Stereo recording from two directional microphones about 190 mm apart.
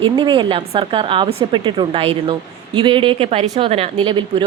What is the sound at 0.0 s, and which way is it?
Speech, 25° right (ahead or behind).